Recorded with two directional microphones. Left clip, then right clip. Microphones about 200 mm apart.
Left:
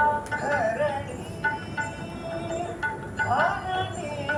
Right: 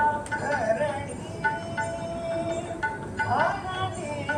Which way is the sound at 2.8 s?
40° left (ahead or behind).